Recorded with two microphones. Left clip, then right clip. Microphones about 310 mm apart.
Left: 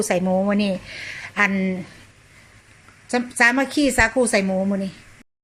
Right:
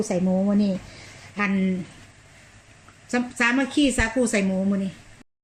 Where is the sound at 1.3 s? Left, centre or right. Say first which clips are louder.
Left 5 dB; left.